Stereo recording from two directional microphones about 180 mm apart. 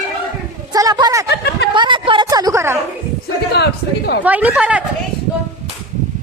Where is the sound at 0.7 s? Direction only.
20° right (ahead or behind).